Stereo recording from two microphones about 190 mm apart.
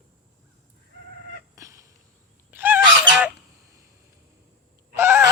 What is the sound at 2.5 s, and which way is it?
Goose, 10° right (ahead or behind).